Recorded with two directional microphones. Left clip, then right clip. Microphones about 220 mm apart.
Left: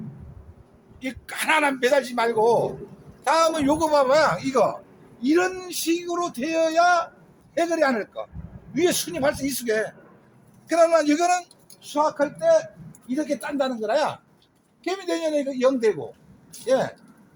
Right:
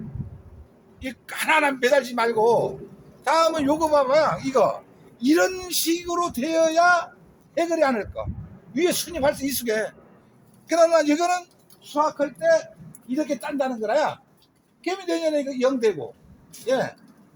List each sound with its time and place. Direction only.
1.0 s a man's voice: 5° left (ahead or behind)
5.2 s a man's voice: 50° right (ahead or behind); by 11.4 s 15° right (ahead or behind)
11.8 s a man's voice: centre (ahead or behind)
13.1 s a woman's voice: 15° left (ahead or behind)